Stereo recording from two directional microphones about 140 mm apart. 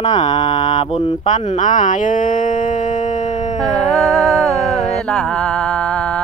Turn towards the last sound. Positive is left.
turn(degrees=5)  # may be behind; listen again after turning